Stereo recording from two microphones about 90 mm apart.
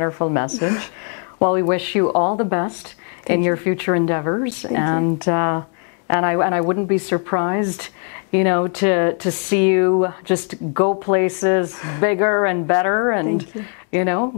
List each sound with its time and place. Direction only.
0.0 s a woman's voice: 20° left (ahead or behind)
2.0 s a woman's voice: 25° left (ahead or behind)